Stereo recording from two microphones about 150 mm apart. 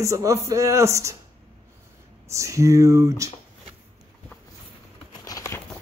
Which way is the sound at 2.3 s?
20° right (ahead or behind).